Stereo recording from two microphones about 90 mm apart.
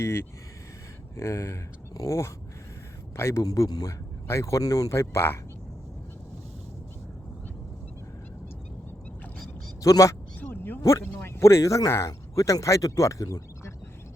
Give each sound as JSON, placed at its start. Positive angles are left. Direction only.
{"t": 0.0, "sound": "speech", "side_deg": 30}
{"t": 3.4, "sound": "speech", "side_deg": 45}
{"t": 9.8, "sound": "speech", "side_deg": 35}
{"t": 10.5, "sound": "a sound", "side_deg": 25}
{"t": 10.8, "sound": "speech", "side_deg": 35}